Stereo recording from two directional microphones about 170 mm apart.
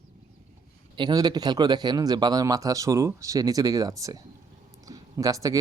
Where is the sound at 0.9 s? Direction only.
25° right (ahead or behind).